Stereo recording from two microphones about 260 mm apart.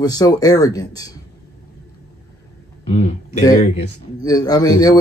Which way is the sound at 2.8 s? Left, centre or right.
Left.